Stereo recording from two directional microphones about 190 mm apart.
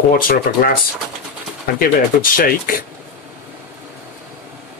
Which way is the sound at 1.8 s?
50° left (ahead or behind).